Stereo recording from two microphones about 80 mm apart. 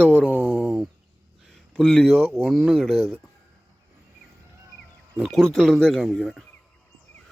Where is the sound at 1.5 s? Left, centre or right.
Centre.